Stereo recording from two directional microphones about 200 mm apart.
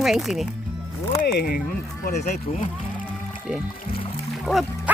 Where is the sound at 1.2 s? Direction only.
50° left (ahead or behind); by 2.7 s 30° left (ahead or behind).